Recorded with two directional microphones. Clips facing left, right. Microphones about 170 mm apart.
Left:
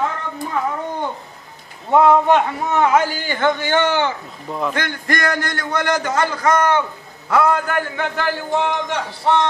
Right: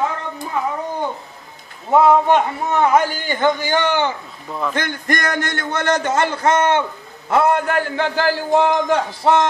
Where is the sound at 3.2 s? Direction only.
15° right (ahead or behind).